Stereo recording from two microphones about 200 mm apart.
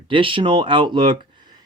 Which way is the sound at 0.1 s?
25° right (ahead or behind).